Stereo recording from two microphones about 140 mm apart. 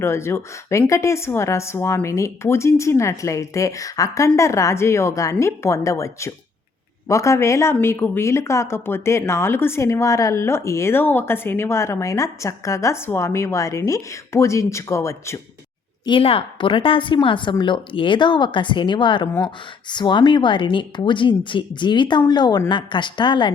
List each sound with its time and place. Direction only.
0.0 s speech: 20° left (ahead or behind)
16.0 s a woman's voice: 40° left (ahead or behind)